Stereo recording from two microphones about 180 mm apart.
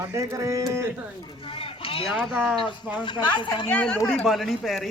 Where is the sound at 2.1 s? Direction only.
5° right (ahead or behind).